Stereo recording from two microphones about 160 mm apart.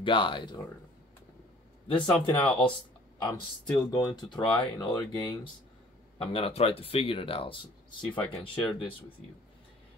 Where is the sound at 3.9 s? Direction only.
25° left (ahead or behind).